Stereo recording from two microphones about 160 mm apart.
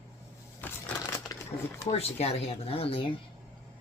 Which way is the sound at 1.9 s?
40° left (ahead or behind).